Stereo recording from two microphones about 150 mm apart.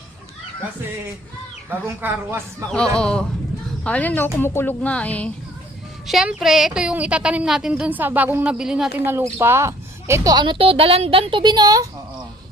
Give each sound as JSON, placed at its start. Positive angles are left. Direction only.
{"t": 1.7, "sound": "a woman's voice", "side_deg": -15}
{"t": 2.6, "sound": "a woman's voice", "side_deg": 5}
{"t": 6.1, "sound": "a woman's voice", "side_deg": 0}
{"t": 9.0, "sound": "speech", "side_deg": -15}